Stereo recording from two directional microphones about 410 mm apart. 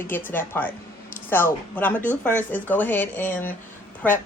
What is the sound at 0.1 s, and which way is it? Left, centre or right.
A man's voice, centre.